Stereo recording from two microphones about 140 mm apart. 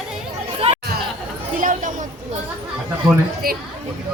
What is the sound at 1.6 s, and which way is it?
Chatter, 65° right (ahead or behind).